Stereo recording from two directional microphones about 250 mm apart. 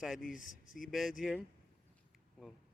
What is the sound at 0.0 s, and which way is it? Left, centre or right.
Speech, centre.